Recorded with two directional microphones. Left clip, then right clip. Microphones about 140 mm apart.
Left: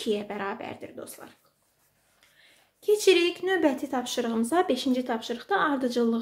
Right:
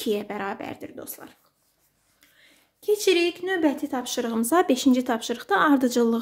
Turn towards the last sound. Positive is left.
turn(degrees=-45)  # may be behind; listen again after turning